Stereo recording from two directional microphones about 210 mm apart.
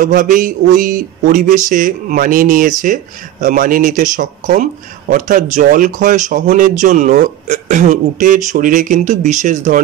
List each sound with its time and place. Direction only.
0.0 s speech: 40° right (ahead or behind)